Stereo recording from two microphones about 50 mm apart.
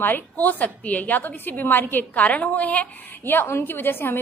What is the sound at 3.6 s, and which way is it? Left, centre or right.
Speech, left.